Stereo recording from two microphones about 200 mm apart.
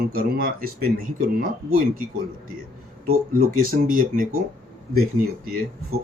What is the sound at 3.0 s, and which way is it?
Speech, 45° right (ahead or behind).